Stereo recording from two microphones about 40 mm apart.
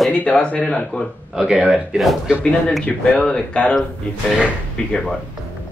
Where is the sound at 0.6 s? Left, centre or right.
Centre.